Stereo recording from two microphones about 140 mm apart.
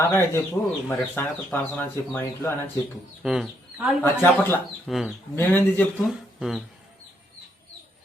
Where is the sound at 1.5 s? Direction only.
10° left (ahead or behind).